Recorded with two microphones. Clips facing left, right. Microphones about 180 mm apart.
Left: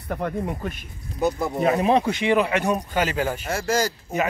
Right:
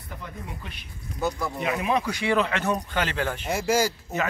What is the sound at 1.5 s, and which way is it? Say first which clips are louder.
Speech: left 9 dB; 40° left (ahead or behind).